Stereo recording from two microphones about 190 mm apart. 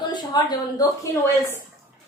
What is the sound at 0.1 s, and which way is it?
A woman's voice, 20° left (ahead or behind).